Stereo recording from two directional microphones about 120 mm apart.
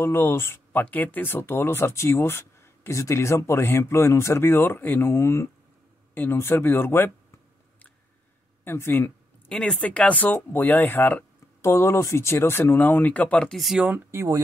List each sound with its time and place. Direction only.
0.0 s speech: 20° left (ahead or behind)
8.6 s speech: 20° left (ahead or behind)
9.5 s speech: 10° left (ahead or behind)
13.8 s speech: 20° right (ahead or behind)